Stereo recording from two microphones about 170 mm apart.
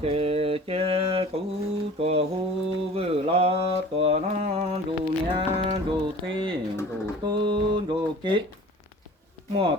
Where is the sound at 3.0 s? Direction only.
35° right (ahead or behind).